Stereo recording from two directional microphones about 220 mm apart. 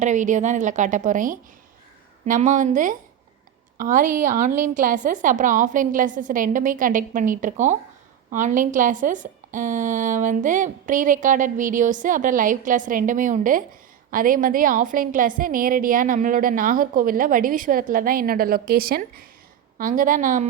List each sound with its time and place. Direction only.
0.0 s a woman's voice: 35° right (ahead or behind)